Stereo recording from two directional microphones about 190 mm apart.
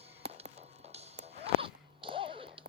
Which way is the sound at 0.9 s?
35° right (ahead or behind).